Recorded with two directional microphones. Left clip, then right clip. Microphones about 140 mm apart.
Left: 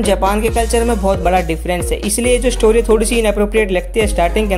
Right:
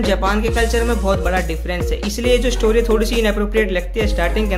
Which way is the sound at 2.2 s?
35° left (ahead or behind).